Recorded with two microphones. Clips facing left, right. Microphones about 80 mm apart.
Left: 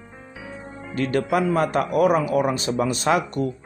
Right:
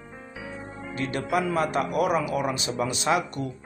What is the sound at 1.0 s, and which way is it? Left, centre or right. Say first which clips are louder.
A man's voice: left 5 dB; left.